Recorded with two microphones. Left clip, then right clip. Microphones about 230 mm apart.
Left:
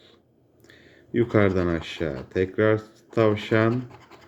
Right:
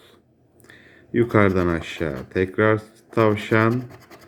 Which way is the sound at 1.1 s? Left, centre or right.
Centre.